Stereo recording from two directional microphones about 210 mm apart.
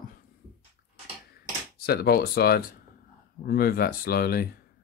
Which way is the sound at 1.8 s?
50° left (ahead or behind).